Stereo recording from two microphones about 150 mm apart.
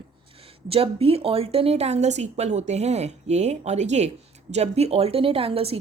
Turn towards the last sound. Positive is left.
turn(degrees=-40)  # may be behind; listen again after turning